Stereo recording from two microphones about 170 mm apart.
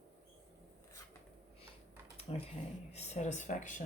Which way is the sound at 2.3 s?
35° left (ahead or behind).